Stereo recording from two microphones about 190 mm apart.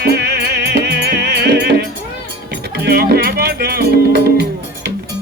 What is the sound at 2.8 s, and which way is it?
Music, 55° right (ahead or behind).